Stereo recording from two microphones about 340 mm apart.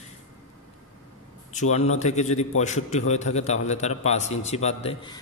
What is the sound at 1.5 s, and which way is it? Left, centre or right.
A man's voice, left.